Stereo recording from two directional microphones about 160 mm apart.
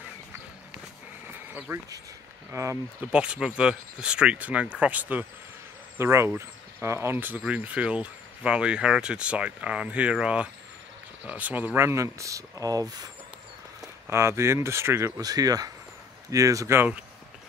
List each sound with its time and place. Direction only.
1.2 s a sound: 10° right (ahead or behind)
2.5 s speech: 15° right (ahead or behind)
3.1 s speech: 5° right (ahead or behind)